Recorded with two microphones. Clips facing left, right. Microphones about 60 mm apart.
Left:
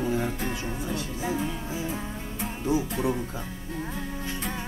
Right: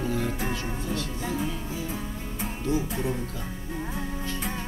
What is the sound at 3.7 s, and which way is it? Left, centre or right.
Music, centre.